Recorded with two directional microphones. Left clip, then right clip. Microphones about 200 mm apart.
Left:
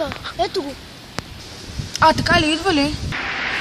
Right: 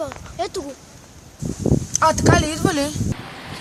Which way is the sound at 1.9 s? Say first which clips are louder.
Left 3 dB; 35° right (ahead or behind).